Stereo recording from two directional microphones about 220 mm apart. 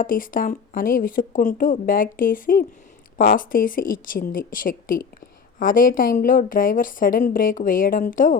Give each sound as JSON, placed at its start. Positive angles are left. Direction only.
{"t": 0.0, "sound": "a woman's voice", "side_deg": 40}